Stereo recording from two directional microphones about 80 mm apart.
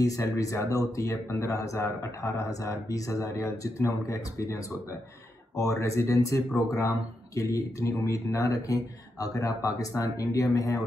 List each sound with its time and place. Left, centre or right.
0.0 s speech: left